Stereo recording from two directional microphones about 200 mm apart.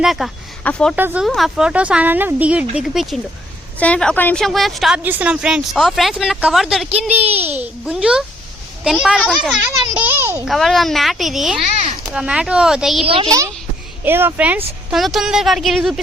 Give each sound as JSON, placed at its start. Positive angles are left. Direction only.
{"t": 0.0, "sound": "speech", "side_deg": 0}
{"t": 0.9, "sound": "a woman's voice", "side_deg": -10}
{"t": 7.1, "sound": "a child's voice", "side_deg": -30}
{"t": 7.6, "sound": "a woman's voice", "side_deg": -5}
{"t": 10.5, "sound": "a woman's voice", "side_deg": 0}